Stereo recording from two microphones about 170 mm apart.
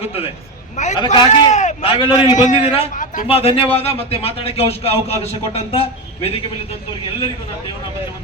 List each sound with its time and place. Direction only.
0.9 s a man's voice: 25° left (ahead or behind)
1.5 s speech: 40° left (ahead or behind)
2.9 s a sound: 50° left (ahead or behind)
3.2 s speech: 35° left (ahead or behind)